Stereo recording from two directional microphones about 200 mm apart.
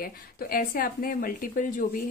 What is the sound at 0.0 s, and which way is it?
A woman's voice, 45° left (ahead or behind).